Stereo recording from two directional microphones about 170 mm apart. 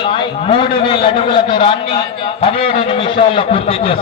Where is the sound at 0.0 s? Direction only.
30° left (ahead or behind).